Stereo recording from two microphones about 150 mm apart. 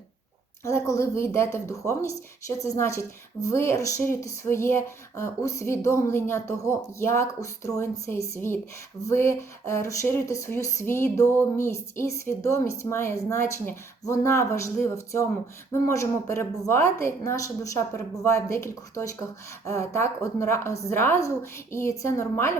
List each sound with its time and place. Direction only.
0.6 s speech: 20° left (ahead or behind)